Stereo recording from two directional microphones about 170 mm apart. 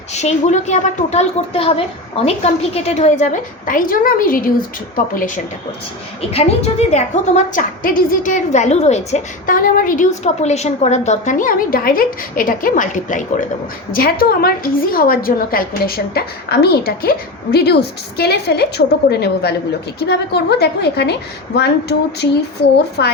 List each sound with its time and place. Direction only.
0.1 s a woman's voice: 40° left (ahead or behind)
3.7 s a woman's voice: 55° left (ahead or behind)
6.3 s a woman's voice: 40° left (ahead or behind)
13.9 s a woman's voice: 60° left (ahead or behind); by 23.1 s 80° left